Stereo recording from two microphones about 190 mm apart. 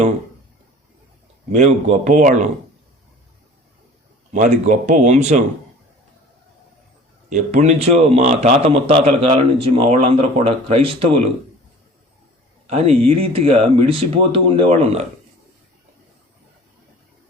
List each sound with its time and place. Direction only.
1.5 s a man's voice: 40° right (ahead or behind)
4.3 s a man's voice: 40° right (ahead or behind)
7.3 s a man's voice: 40° right (ahead or behind)
12.6 s a man's voice: 35° right (ahead or behind)